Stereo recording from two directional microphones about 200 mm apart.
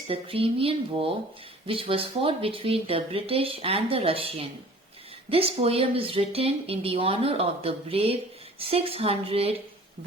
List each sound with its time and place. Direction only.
0.1 s speech: 30° right (ahead or behind)